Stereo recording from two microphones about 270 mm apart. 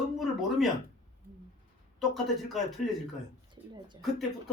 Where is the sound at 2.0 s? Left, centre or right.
Centre.